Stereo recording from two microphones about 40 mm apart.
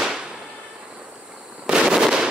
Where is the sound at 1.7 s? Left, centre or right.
Centre.